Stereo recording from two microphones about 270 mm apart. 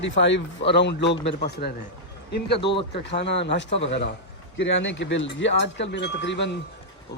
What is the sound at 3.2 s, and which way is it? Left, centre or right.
A man's voice, left.